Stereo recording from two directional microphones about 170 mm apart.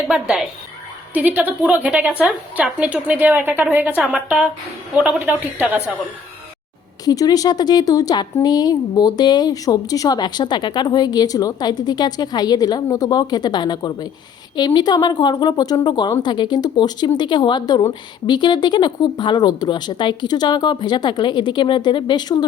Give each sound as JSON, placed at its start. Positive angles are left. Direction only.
{"t": 0.1, "sound": "a woman's voice", "side_deg": -5}
{"t": 7.0, "sound": "speech", "side_deg": 20}